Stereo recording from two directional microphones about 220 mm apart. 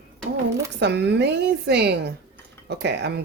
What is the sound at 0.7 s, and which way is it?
Speech, 50° right (ahead or behind).